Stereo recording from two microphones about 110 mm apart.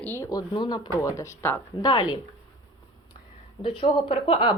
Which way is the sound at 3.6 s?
50° left (ahead or behind).